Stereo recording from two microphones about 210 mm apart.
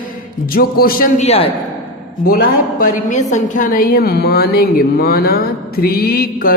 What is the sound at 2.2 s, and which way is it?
A woman's voice, 45° left (ahead or behind).